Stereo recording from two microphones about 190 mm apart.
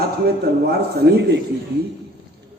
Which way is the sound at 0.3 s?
55° right (ahead or behind).